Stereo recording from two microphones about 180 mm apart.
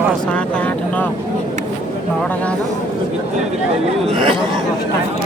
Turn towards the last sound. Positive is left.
turn(degrees=-35)  # may be behind; listen again after turning